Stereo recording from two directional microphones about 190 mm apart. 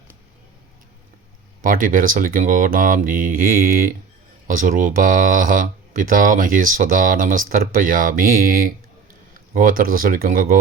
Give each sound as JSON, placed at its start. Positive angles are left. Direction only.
{"t": 1.6, "sound": "speech", "side_deg": -45}